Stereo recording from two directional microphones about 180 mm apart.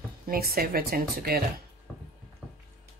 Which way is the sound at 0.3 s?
55° right (ahead or behind).